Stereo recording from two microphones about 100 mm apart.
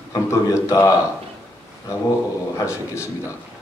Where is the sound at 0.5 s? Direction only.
30° left (ahead or behind).